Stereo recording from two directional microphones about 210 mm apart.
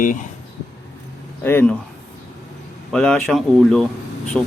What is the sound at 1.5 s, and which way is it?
Speech, 10° left (ahead or behind).